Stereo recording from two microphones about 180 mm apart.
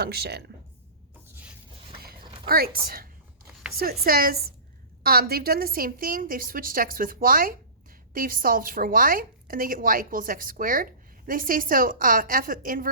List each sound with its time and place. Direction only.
0.0 s speech: 60° right (ahead or behind)
2.5 s speech: 55° right (ahead or behind)